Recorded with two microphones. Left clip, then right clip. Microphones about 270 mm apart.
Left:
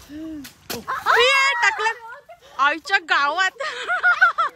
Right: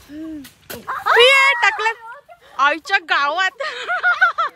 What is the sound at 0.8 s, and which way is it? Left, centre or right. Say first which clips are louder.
Speech: right 3 dB; right.